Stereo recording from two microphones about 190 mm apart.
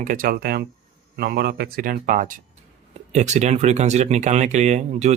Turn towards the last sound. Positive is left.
turn(degrees=-35)  # may be behind; listen again after turning